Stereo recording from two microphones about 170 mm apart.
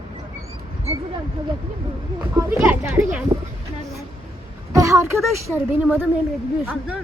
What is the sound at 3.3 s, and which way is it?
Speech, 25° right (ahead or behind).